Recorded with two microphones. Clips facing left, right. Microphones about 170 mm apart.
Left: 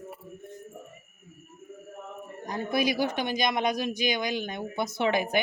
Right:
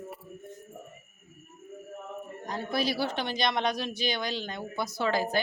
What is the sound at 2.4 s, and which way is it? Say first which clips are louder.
Speech: left 3 dB; 15° left (ahead or behind).